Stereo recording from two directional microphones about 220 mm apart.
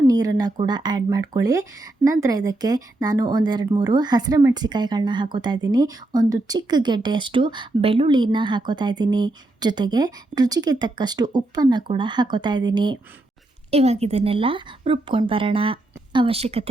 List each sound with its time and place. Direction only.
0.1 s speech: 15° right (ahead or behind)